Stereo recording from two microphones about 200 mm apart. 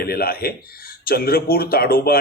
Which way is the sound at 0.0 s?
50° left (ahead or behind).